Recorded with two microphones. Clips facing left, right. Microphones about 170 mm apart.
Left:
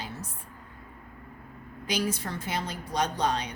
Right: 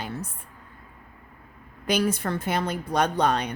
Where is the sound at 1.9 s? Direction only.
55° right (ahead or behind).